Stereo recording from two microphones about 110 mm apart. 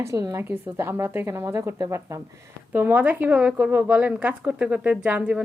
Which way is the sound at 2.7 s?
15° right (ahead or behind).